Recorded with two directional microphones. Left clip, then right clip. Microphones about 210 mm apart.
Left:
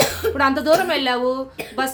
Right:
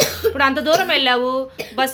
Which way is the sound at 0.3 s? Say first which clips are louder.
Even; 10° right (ahead or behind).